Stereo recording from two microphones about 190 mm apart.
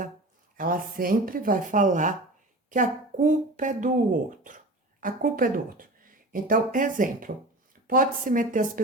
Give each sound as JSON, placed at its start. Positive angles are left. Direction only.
{"t": 0.5, "sound": "speech", "side_deg": -50}